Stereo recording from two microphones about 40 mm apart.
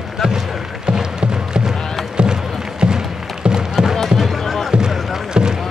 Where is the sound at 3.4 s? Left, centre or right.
Centre.